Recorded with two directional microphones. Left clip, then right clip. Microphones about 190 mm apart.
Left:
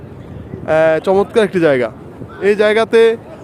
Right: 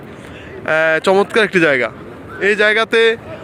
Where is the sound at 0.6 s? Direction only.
10° left (ahead or behind).